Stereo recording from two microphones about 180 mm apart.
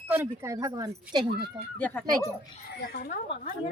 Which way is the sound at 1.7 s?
10° left (ahead or behind).